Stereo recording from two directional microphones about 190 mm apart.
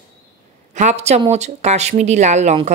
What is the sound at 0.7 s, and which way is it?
A woman's voice, 35° right (ahead or behind).